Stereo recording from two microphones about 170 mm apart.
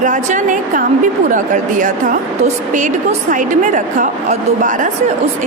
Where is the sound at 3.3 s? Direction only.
45° right (ahead or behind).